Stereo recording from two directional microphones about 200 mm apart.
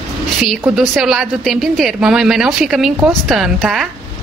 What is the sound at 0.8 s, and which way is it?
A woman's voice, centre (ahead or behind).